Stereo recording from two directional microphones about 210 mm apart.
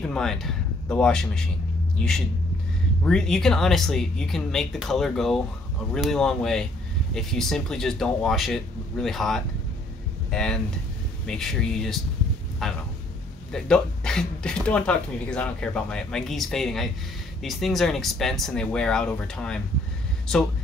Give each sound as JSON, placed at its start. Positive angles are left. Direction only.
{"t": 0.1, "sound": "speech", "side_deg": 0}
{"t": 3.0, "sound": "speech", "side_deg": 5}